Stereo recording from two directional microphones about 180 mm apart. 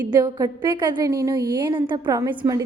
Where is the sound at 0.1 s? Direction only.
20° right (ahead or behind).